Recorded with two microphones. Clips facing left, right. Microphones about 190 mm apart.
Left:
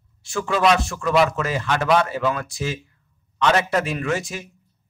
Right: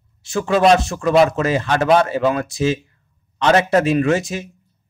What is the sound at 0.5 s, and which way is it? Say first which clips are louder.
Speech: right 5 dB; 35° right (ahead or behind).